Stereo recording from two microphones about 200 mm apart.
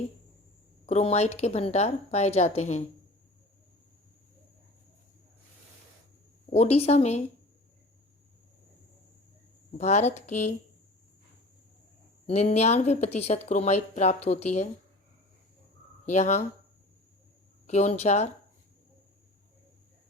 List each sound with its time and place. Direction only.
0.9 s speech: 35° left (ahead or behind)
6.5 s speech: 30° left (ahead or behind)
9.7 s speech: 35° left (ahead or behind)
12.2 s speech: 35° left (ahead or behind)
16.0 s speech: 35° left (ahead or behind)
17.7 s speech: 35° left (ahead or behind)